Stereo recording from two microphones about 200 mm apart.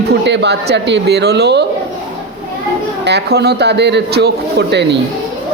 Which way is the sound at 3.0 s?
55° right (ahead or behind).